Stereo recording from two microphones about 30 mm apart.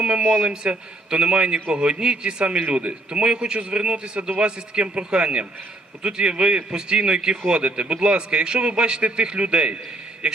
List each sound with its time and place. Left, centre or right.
0.2 s a man's voice: right
0.5 s a man's voice: right